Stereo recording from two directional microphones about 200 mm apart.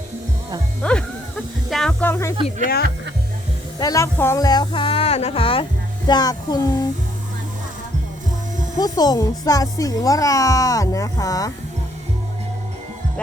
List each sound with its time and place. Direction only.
0.8 s speech: 5° left (ahead or behind)
3.8 s speech: 15° left (ahead or behind)
8.8 s speech: 20° left (ahead or behind)